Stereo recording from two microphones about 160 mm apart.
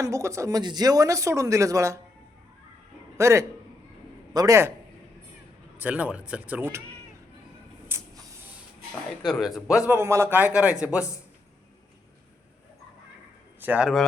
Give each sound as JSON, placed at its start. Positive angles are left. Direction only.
{"t": 0.0, "sound": "speech", "side_deg": -20}
{"t": 3.2, "sound": "a man's voice", "side_deg": -20}
{"t": 5.8, "sound": "a man's voice", "side_deg": -10}
{"t": 7.9, "sound": "a sound", "side_deg": -15}
{"t": 9.2, "sound": "a man's voice", "side_deg": 0}
{"t": 13.6, "sound": "speech", "side_deg": -10}